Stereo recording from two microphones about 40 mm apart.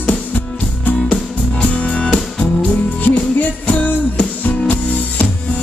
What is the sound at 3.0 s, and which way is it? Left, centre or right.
Music, left.